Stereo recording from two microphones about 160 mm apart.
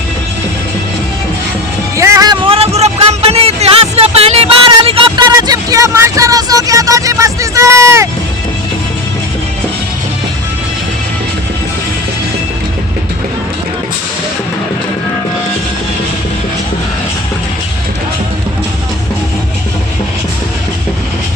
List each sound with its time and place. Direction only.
2.0 s music: 20° right (ahead or behind); by 4.4 s 40° right (ahead or behind)
4.9 s vehicle: 30° right (ahead or behind)